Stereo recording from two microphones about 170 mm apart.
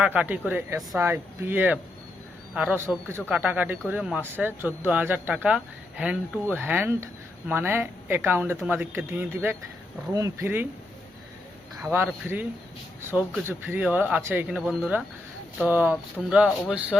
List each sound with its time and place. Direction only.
0.0 s speech: 5° right (ahead or behind)
11.8 s speech: 15° right (ahead or behind)
16.2 s speech: 5° left (ahead or behind)